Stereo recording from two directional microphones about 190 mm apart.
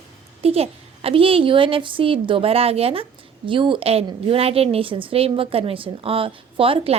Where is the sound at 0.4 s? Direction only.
30° right (ahead or behind).